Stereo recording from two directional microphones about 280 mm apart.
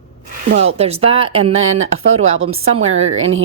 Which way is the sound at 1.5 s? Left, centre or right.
Right.